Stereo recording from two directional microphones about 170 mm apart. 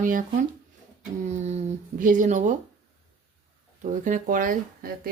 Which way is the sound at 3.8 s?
50° right (ahead or behind).